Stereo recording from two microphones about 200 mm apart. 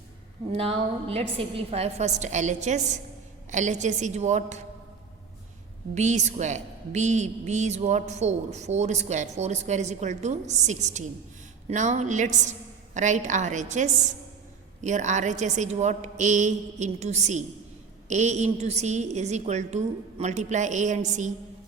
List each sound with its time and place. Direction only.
0.5 s a woman's voice: 30° right (ahead or behind)
5.9 s a woman's voice: 35° right (ahead or behind)